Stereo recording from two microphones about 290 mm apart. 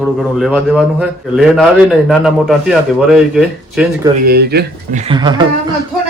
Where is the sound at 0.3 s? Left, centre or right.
Centre.